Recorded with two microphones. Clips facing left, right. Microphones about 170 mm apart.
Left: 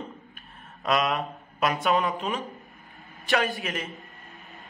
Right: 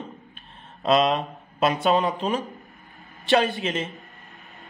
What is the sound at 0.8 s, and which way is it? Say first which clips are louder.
A man's voice: right 5 dB; 25° right (ahead or behind).